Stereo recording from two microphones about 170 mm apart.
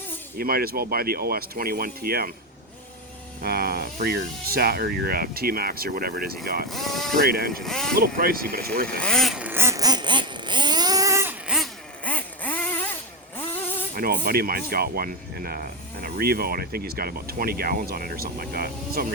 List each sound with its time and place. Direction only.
0.3 s speech: 60° right (ahead or behind)
3.4 s speech: 65° right (ahead or behind)
6.7 s speech: centre (ahead or behind)
7.2 s speech: 65° right (ahead or behind)
7.6 s speech: centre (ahead or behind)
7.9 s speech: 65° right (ahead or behind)
9.0 s vehicle: 5° left (ahead or behind)
12.0 s vehicle: 10° left (ahead or behind)
13.9 s speech: 60° right (ahead or behind)